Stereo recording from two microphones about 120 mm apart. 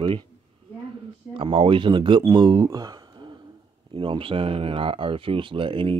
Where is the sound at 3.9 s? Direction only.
45° right (ahead or behind).